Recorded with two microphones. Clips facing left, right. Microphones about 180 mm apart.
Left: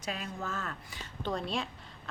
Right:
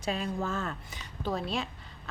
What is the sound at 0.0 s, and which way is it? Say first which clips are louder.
Speech: right 6 dB; 30° right (ahead or behind).